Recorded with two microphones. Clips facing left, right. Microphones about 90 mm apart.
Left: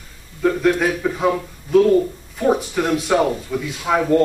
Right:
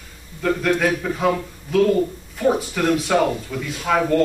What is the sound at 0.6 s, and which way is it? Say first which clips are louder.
A man's voice: even; 5° left (ahead or behind).